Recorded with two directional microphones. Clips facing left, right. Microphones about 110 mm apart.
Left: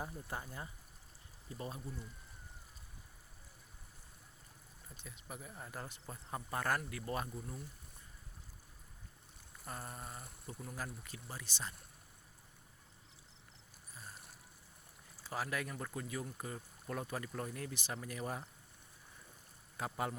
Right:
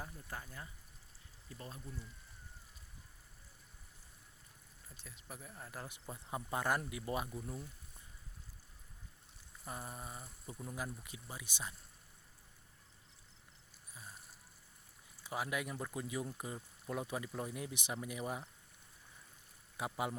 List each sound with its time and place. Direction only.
0.0 s speech: 25° left (ahead or behind)
5.0 s speech: centre (ahead or behind)
5.9 s speech: 15° right (ahead or behind)
7.3 s speech: 5° right (ahead or behind)
9.6 s speech: 10° right (ahead or behind)
15.2 s speech: 15° right (ahead or behind)
19.7 s speech: 15° right (ahead or behind)